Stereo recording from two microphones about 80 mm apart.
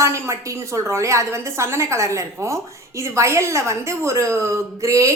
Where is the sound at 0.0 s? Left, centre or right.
Right.